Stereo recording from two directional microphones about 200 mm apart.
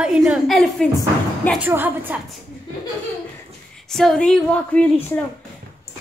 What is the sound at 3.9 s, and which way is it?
Speech, centre (ahead or behind).